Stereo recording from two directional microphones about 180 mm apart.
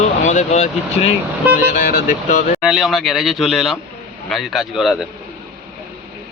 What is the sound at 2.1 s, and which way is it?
Music, 45° left (ahead or behind).